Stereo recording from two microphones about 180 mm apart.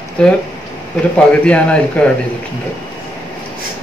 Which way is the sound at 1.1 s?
5° left (ahead or behind).